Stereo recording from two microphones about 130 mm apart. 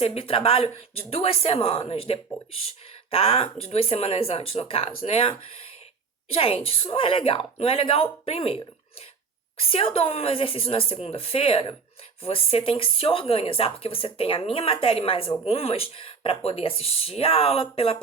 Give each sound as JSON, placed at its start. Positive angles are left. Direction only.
{"t": 0.0, "sound": "speech", "side_deg": 50}